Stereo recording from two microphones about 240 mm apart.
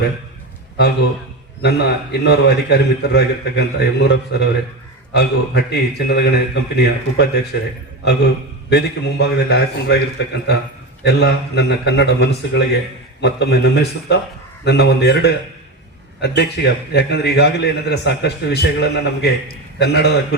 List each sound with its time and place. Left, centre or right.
1.6 s a man's voice: left
8.7 s a man's voice: left